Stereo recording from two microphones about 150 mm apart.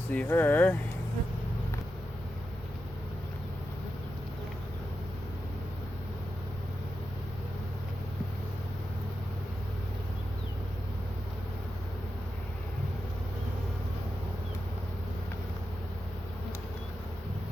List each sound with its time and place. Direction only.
0.1 s speech: 10° left (ahead or behind)